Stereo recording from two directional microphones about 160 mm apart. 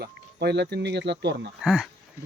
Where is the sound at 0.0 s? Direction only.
90° right.